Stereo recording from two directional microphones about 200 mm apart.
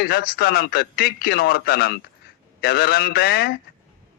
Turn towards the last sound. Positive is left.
turn(degrees=50)  # may be behind; listen again after turning